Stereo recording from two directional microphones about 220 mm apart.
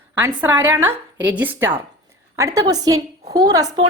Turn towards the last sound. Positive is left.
turn(degrees=-20)  # may be behind; listen again after turning